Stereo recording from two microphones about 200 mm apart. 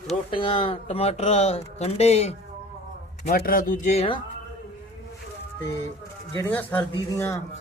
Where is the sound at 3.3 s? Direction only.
45° left (ahead or behind); by 4.2 s 30° left (ahead or behind).